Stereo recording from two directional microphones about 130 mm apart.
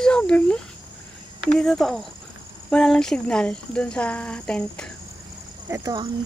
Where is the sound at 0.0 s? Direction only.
5° left (ahead or behind).